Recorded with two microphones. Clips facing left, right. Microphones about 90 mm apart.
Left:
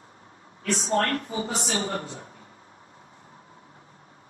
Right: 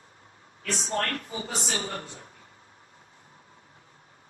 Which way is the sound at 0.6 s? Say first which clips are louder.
Left 5 dB; 35° left (ahead or behind).